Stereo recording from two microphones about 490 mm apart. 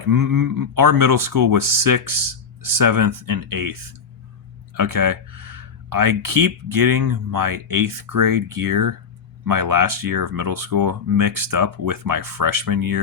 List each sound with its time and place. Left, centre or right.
0.1 s speech: right